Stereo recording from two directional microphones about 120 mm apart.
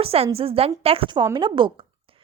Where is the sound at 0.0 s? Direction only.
55° right (ahead or behind).